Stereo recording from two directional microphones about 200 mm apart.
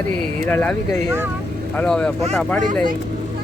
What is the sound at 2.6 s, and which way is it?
Speech, 40° right (ahead or behind).